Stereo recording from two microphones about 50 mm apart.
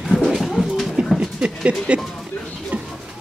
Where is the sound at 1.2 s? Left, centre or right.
Centre.